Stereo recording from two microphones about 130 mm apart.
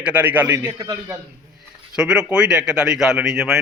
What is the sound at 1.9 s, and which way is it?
Speech, 5° right (ahead or behind).